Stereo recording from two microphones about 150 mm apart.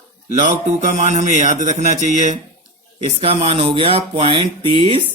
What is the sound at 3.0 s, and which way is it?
Speech, 40° right (ahead or behind).